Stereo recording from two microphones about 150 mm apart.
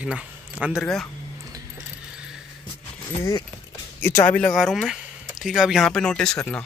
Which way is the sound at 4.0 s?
10° left (ahead or behind).